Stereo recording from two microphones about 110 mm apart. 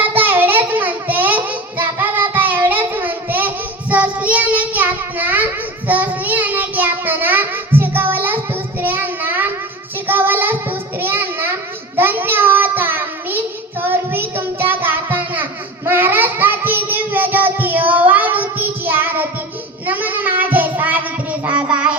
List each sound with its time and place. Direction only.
0.0 s child singing: 15° right (ahead or behind)